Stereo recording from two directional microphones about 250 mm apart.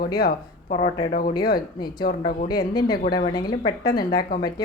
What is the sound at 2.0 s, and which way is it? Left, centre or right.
Speech, left.